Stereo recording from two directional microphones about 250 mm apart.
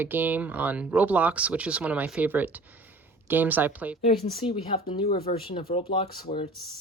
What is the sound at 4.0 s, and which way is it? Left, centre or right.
Speech, left.